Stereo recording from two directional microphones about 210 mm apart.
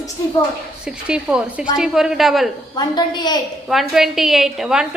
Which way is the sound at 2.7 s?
20° left (ahead or behind).